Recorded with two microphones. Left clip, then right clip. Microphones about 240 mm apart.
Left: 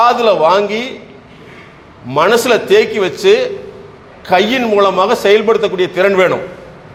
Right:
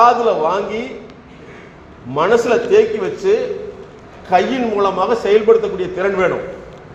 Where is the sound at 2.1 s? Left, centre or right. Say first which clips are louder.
Left 3 dB; left.